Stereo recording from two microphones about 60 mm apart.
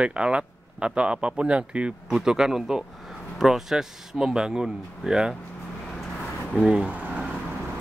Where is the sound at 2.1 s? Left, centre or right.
Centre.